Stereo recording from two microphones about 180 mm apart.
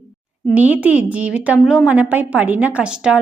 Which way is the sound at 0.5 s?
10° right (ahead or behind).